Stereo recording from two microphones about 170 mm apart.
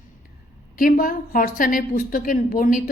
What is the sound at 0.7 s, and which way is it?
A woman's voice, 55° left (ahead or behind).